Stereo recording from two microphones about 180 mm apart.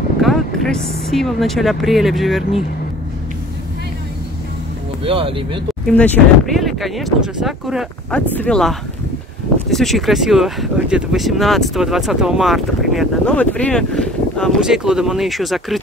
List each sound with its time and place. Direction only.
0.2 s speech: centre (ahead or behind)
5.0 s speech: 30° right (ahead or behind)
5.9 s speech: 10° left (ahead or behind)